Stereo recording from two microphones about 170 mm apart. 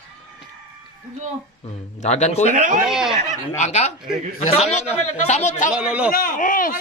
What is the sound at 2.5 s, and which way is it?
Speech, 50° right (ahead or behind).